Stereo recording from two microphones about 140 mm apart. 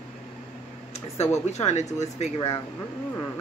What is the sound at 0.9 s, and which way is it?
Speech, 50° left (ahead or behind).